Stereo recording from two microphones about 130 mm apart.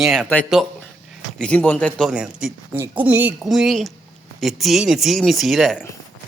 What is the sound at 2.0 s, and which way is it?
Speech, 5° right (ahead or behind).